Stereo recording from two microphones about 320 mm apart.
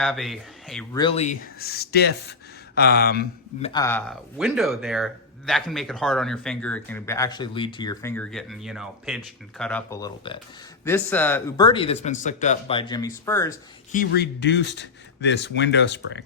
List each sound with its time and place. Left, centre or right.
0.0 s speech: centre
0.9 s speech: centre
3.7 s speech: centre
13.9 s speech: left